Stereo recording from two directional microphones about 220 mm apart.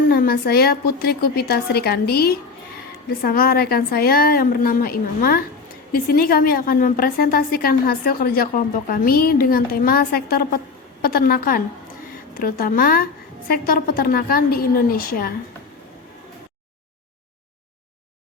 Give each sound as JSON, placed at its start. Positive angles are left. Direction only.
{"t": 0.1, "sound": "a woman's voice", "side_deg": 45}